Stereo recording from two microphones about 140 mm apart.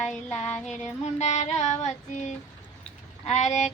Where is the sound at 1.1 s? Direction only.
55° left (ahead or behind).